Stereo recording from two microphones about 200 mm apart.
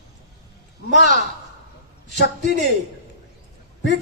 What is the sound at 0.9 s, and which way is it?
A man's voice, 60° left (ahead or behind).